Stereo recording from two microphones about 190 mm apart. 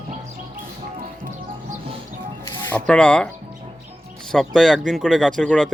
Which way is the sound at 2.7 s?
5° left (ahead or behind).